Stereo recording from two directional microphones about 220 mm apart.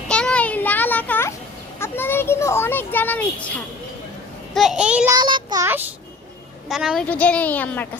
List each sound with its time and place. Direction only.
0.1 s a sound: 5° left (ahead or behind)
1.8 s a child's voice: 10° left (ahead or behind)
5.1 s child singing: 20° right (ahead or behind)
6.7 s a child's voice: centre (ahead or behind)